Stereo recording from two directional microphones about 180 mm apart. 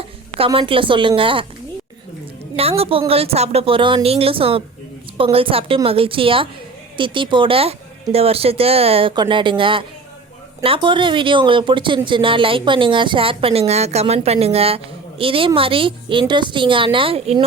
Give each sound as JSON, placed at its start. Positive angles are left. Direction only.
{"t": 0.3, "sound": "speech", "side_deg": -30}
{"t": 2.6, "sound": "a woman's voice", "side_deg": -35}